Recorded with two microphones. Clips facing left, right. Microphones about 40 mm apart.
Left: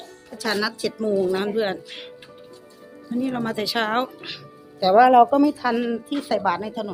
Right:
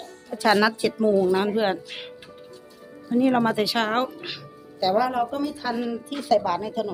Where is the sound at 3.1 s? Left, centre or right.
Right.